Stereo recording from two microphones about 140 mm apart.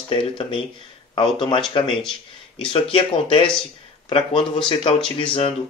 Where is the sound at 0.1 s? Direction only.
40° left (ahead or behind).